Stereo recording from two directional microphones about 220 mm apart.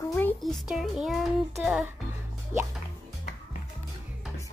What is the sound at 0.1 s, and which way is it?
A child's voice, 10° left (ahead or behind).